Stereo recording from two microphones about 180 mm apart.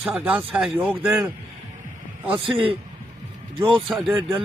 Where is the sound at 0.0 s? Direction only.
10° right (ahead or behind).